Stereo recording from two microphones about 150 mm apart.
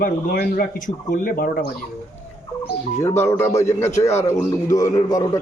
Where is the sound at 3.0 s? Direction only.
15° left (ahead or behind).